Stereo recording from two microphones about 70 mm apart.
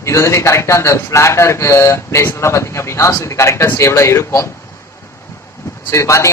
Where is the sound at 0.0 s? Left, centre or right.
Left.